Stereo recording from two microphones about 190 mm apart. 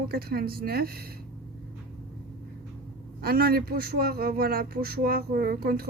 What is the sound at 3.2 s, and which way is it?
A man's voice, 55° right (ahead or behind).